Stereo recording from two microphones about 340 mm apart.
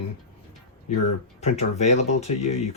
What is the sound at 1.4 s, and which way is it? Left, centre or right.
Speech, centre.